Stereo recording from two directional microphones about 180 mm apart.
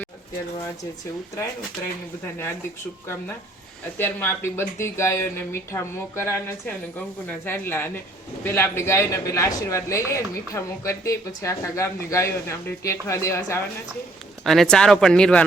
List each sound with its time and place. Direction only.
3.9 s a man's voice: 10° left (ahead or behind)
14.4 s speech: centre (ahead or behind)